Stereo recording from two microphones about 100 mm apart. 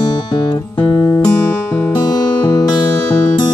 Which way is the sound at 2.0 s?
45° left (ahead or behind).